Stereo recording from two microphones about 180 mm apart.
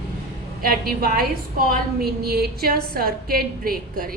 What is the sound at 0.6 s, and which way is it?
A woman's voice, 55° right (ahead or behind).